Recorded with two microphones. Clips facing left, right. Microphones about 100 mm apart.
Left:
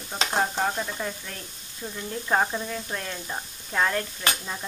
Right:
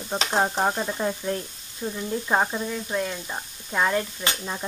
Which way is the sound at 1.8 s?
15° right (ahead or behind).